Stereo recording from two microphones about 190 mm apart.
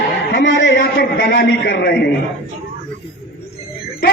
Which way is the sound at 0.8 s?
60° left (ahead or behind).